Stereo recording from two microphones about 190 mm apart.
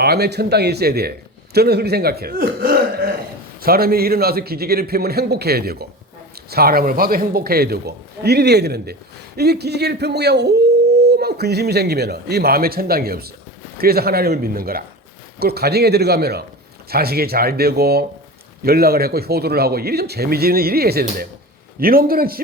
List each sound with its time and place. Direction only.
0.0 s a man's voice: 55° right (ahead or behind)